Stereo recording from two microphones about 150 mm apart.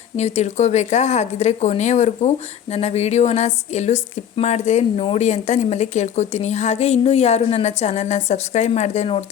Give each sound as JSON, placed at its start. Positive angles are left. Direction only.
{"t": 0.2, "sound": "speech", "side_deg": 45}